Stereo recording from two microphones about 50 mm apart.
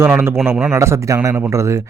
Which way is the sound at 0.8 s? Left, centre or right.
Right.